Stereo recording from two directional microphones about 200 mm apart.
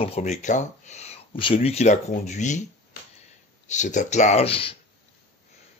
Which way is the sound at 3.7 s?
35° left (ahead or behind).